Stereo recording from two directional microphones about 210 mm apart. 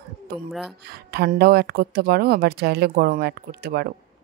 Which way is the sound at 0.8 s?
50° right (ahead or behind).